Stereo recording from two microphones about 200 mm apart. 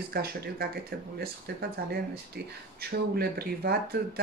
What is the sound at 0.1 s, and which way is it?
Speech, 50° right (ahead or behind).